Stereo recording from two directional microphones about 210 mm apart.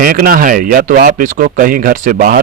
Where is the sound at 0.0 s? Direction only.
40° right (ahead or behind).